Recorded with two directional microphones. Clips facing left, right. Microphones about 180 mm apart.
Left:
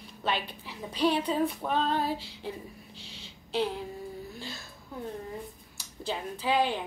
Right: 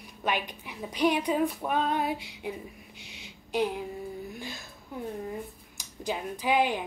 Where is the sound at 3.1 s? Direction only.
15° right (ahead or behind).